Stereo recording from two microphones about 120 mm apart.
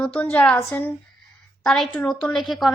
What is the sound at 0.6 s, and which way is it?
Speech, 20° left (ahead or behind).